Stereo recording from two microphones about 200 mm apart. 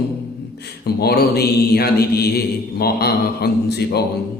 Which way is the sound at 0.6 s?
50° left (ahead or behind).